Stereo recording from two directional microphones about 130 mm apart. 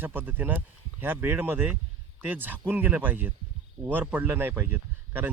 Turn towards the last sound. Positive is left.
turn(degrees=-15)  # may be behind; listen again after turning